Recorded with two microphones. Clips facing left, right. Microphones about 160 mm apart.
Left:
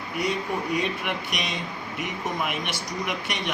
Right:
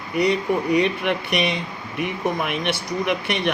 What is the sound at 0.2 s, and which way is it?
Speech, 70° right (ahead or behind).